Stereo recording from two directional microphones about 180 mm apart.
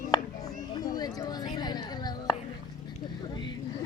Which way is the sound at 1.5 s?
25° left (ahead or behind).